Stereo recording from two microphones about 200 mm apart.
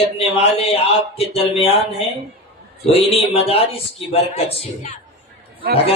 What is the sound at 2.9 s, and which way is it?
A man's voice, 30° left (ahead or behind).